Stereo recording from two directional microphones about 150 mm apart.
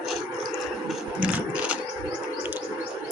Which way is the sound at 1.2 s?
10° right (ahead or behind).